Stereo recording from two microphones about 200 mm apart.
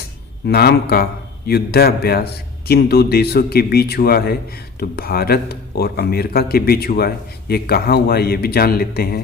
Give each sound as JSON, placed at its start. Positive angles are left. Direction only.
{"t": 0.4, "sound": "a man's voice", "side_deg": 55}